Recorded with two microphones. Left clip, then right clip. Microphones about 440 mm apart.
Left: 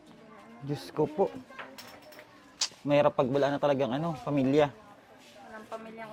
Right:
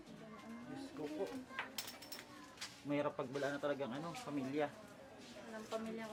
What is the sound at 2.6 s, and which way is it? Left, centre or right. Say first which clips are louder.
Speech: left 16 dB; left.